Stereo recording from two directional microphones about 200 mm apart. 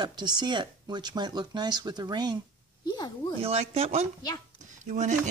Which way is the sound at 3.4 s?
30° right (ahead or behind).